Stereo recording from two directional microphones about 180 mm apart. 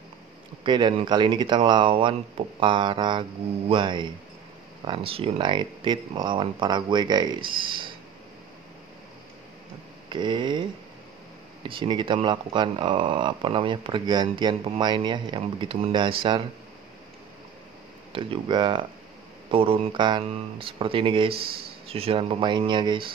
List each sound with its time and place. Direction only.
0.7 s speech: 25° right (ahead or behind)
10.0 s speech: 25° right (ahead or behind)
18.1 s speech: 25° right (ahead or behind)